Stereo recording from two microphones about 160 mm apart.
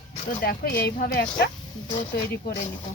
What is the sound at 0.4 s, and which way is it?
Speech, 70° left (ahead or behind).